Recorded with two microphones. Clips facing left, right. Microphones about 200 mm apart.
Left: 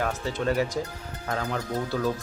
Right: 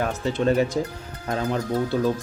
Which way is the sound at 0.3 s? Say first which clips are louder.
Right 7 dB; 25° right (ahead or behind).